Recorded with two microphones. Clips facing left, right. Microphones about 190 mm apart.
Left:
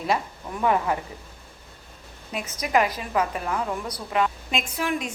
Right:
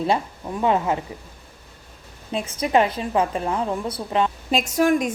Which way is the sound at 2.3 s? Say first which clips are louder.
Right 4 dB; 30° right (ahead or behind).